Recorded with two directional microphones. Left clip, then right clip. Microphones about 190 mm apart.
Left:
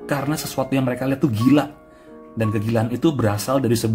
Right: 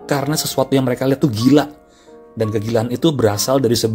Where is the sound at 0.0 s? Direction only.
20° right (ahead or behind).